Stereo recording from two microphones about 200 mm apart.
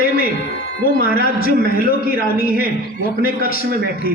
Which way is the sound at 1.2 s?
50° left (ahead or behind).